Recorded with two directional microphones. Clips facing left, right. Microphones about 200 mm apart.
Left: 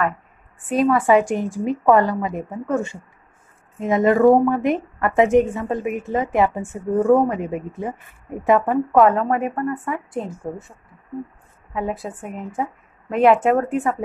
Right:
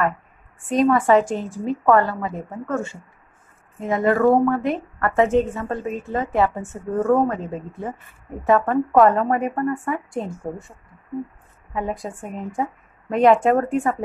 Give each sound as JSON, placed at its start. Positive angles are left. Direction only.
{"t": 0.7, "sound": "a woman's voice", "side_deg": 5}
{"t": 8.9, "sound": "a woman's voice", "side_deg": 0}
{"t": 11.7, "sound": "a woman's voice", "side_deg": 5}